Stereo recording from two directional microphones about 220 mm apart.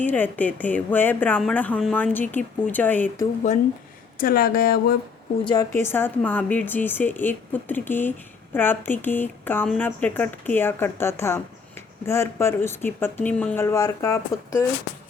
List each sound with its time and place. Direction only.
0.0 s a woman's voice: 10° left (ahead or behind)
4.2 s speech: 40° left (ahead or behind)
5.5 s a woman's voice: 15° left (ahead or behind)